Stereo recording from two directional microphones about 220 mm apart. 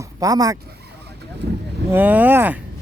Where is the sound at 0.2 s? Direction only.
15° right (ahead or behind).